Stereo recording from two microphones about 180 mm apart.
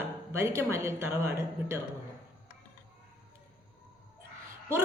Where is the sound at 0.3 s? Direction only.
15° right (ahead or behind).